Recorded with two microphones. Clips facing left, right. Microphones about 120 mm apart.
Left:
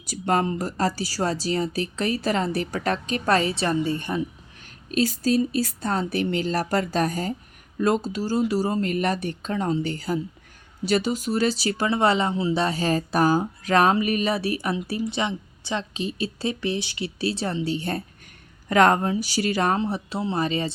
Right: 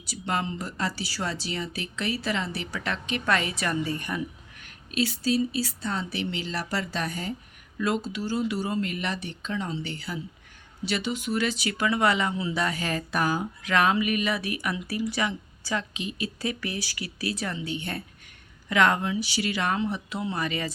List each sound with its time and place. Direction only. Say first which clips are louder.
0.0 s a woman's voice: left 7 dB; 45° left (ahead or behind); by 4.7 s 30° left (ahead or behind)
4.9 s a woman's voice: left 4 dB; 40° left (ahead or behind)